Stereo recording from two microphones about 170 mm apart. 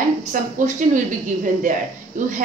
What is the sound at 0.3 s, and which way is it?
A woman's voice, 50° right (ahead or behind).